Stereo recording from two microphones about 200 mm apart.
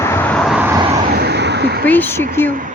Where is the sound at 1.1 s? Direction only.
55° right (ahead or behind).